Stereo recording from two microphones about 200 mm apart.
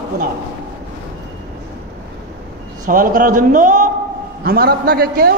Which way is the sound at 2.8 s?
40° right (ahead or behind).